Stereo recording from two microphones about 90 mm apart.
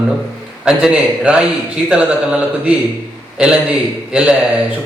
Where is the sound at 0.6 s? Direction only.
10° right (ahead or behind).